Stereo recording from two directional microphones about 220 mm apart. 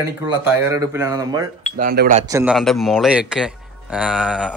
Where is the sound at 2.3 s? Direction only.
10° right (ahead or behind).